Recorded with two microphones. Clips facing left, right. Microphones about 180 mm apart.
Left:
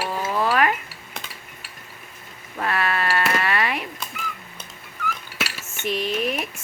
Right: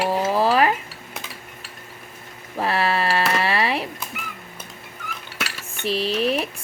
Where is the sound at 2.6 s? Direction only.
30° right (ahead or behind).